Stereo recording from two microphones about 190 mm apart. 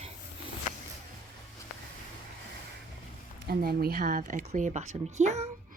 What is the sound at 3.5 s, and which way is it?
Speech, 55° right (ahead or behind).